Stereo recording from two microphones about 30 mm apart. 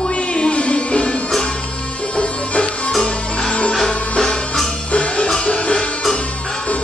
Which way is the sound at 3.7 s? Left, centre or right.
Left.